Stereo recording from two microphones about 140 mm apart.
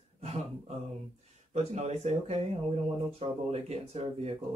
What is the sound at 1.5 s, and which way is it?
Speech, 50° right (ahead or behind).